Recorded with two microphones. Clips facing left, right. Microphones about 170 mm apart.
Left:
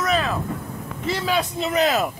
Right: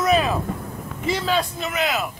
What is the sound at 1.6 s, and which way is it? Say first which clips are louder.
Speech: left 4 dB; 35° left (ahead or behind).